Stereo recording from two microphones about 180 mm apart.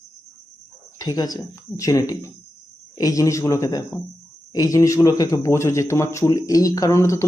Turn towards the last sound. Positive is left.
turn(degrees=15)  # may be behind; listen again after turning